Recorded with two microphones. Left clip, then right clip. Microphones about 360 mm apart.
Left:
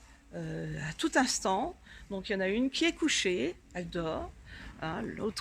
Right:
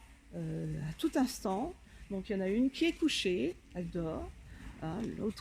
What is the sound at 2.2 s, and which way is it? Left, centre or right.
Speech, left.